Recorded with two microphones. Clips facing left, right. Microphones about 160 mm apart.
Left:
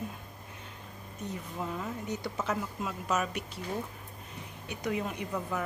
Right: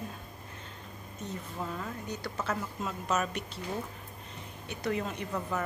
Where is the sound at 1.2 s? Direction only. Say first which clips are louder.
Left 1 dB; 15° left (ahead or behind).